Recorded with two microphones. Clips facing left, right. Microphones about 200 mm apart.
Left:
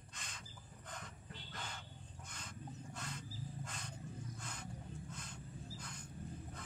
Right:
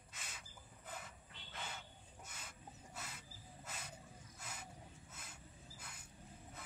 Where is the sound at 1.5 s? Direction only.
5° right (ahead or behind).